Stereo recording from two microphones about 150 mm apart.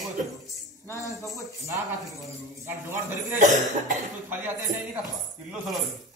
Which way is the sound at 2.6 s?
15° right (ahead or behind).